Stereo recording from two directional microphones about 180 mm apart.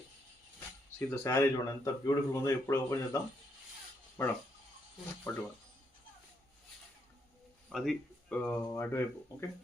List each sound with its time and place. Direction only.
0.9 s speech: 10° left (ahead or behind)
4.2 s speech: 15° left (ahead or behind)
7.7 s speech: centre (ahead or behind)